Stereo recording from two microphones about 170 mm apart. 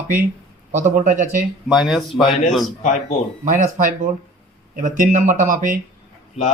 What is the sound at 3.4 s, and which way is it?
Speech, 50° right (ahead or behind).